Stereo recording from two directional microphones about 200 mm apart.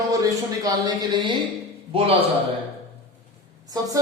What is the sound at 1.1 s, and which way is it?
Speech, 25° right (ahead or behind).